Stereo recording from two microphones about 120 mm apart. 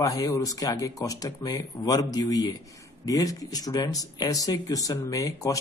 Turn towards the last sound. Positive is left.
turn(degrees=30)  # may be behind; listen again after turning